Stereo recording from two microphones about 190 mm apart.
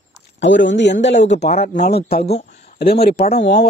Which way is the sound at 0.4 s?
70° left (ahead or behind).